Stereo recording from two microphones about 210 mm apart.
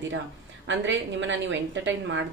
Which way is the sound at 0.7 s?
60° right (ahead or behind).